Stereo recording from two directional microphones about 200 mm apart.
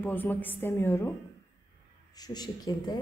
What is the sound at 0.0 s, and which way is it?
A woman's voice, 10° left (ahead or behind).